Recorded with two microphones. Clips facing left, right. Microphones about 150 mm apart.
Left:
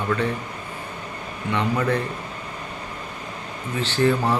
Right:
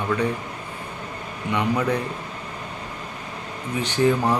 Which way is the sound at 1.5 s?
10° right (ahead or behind).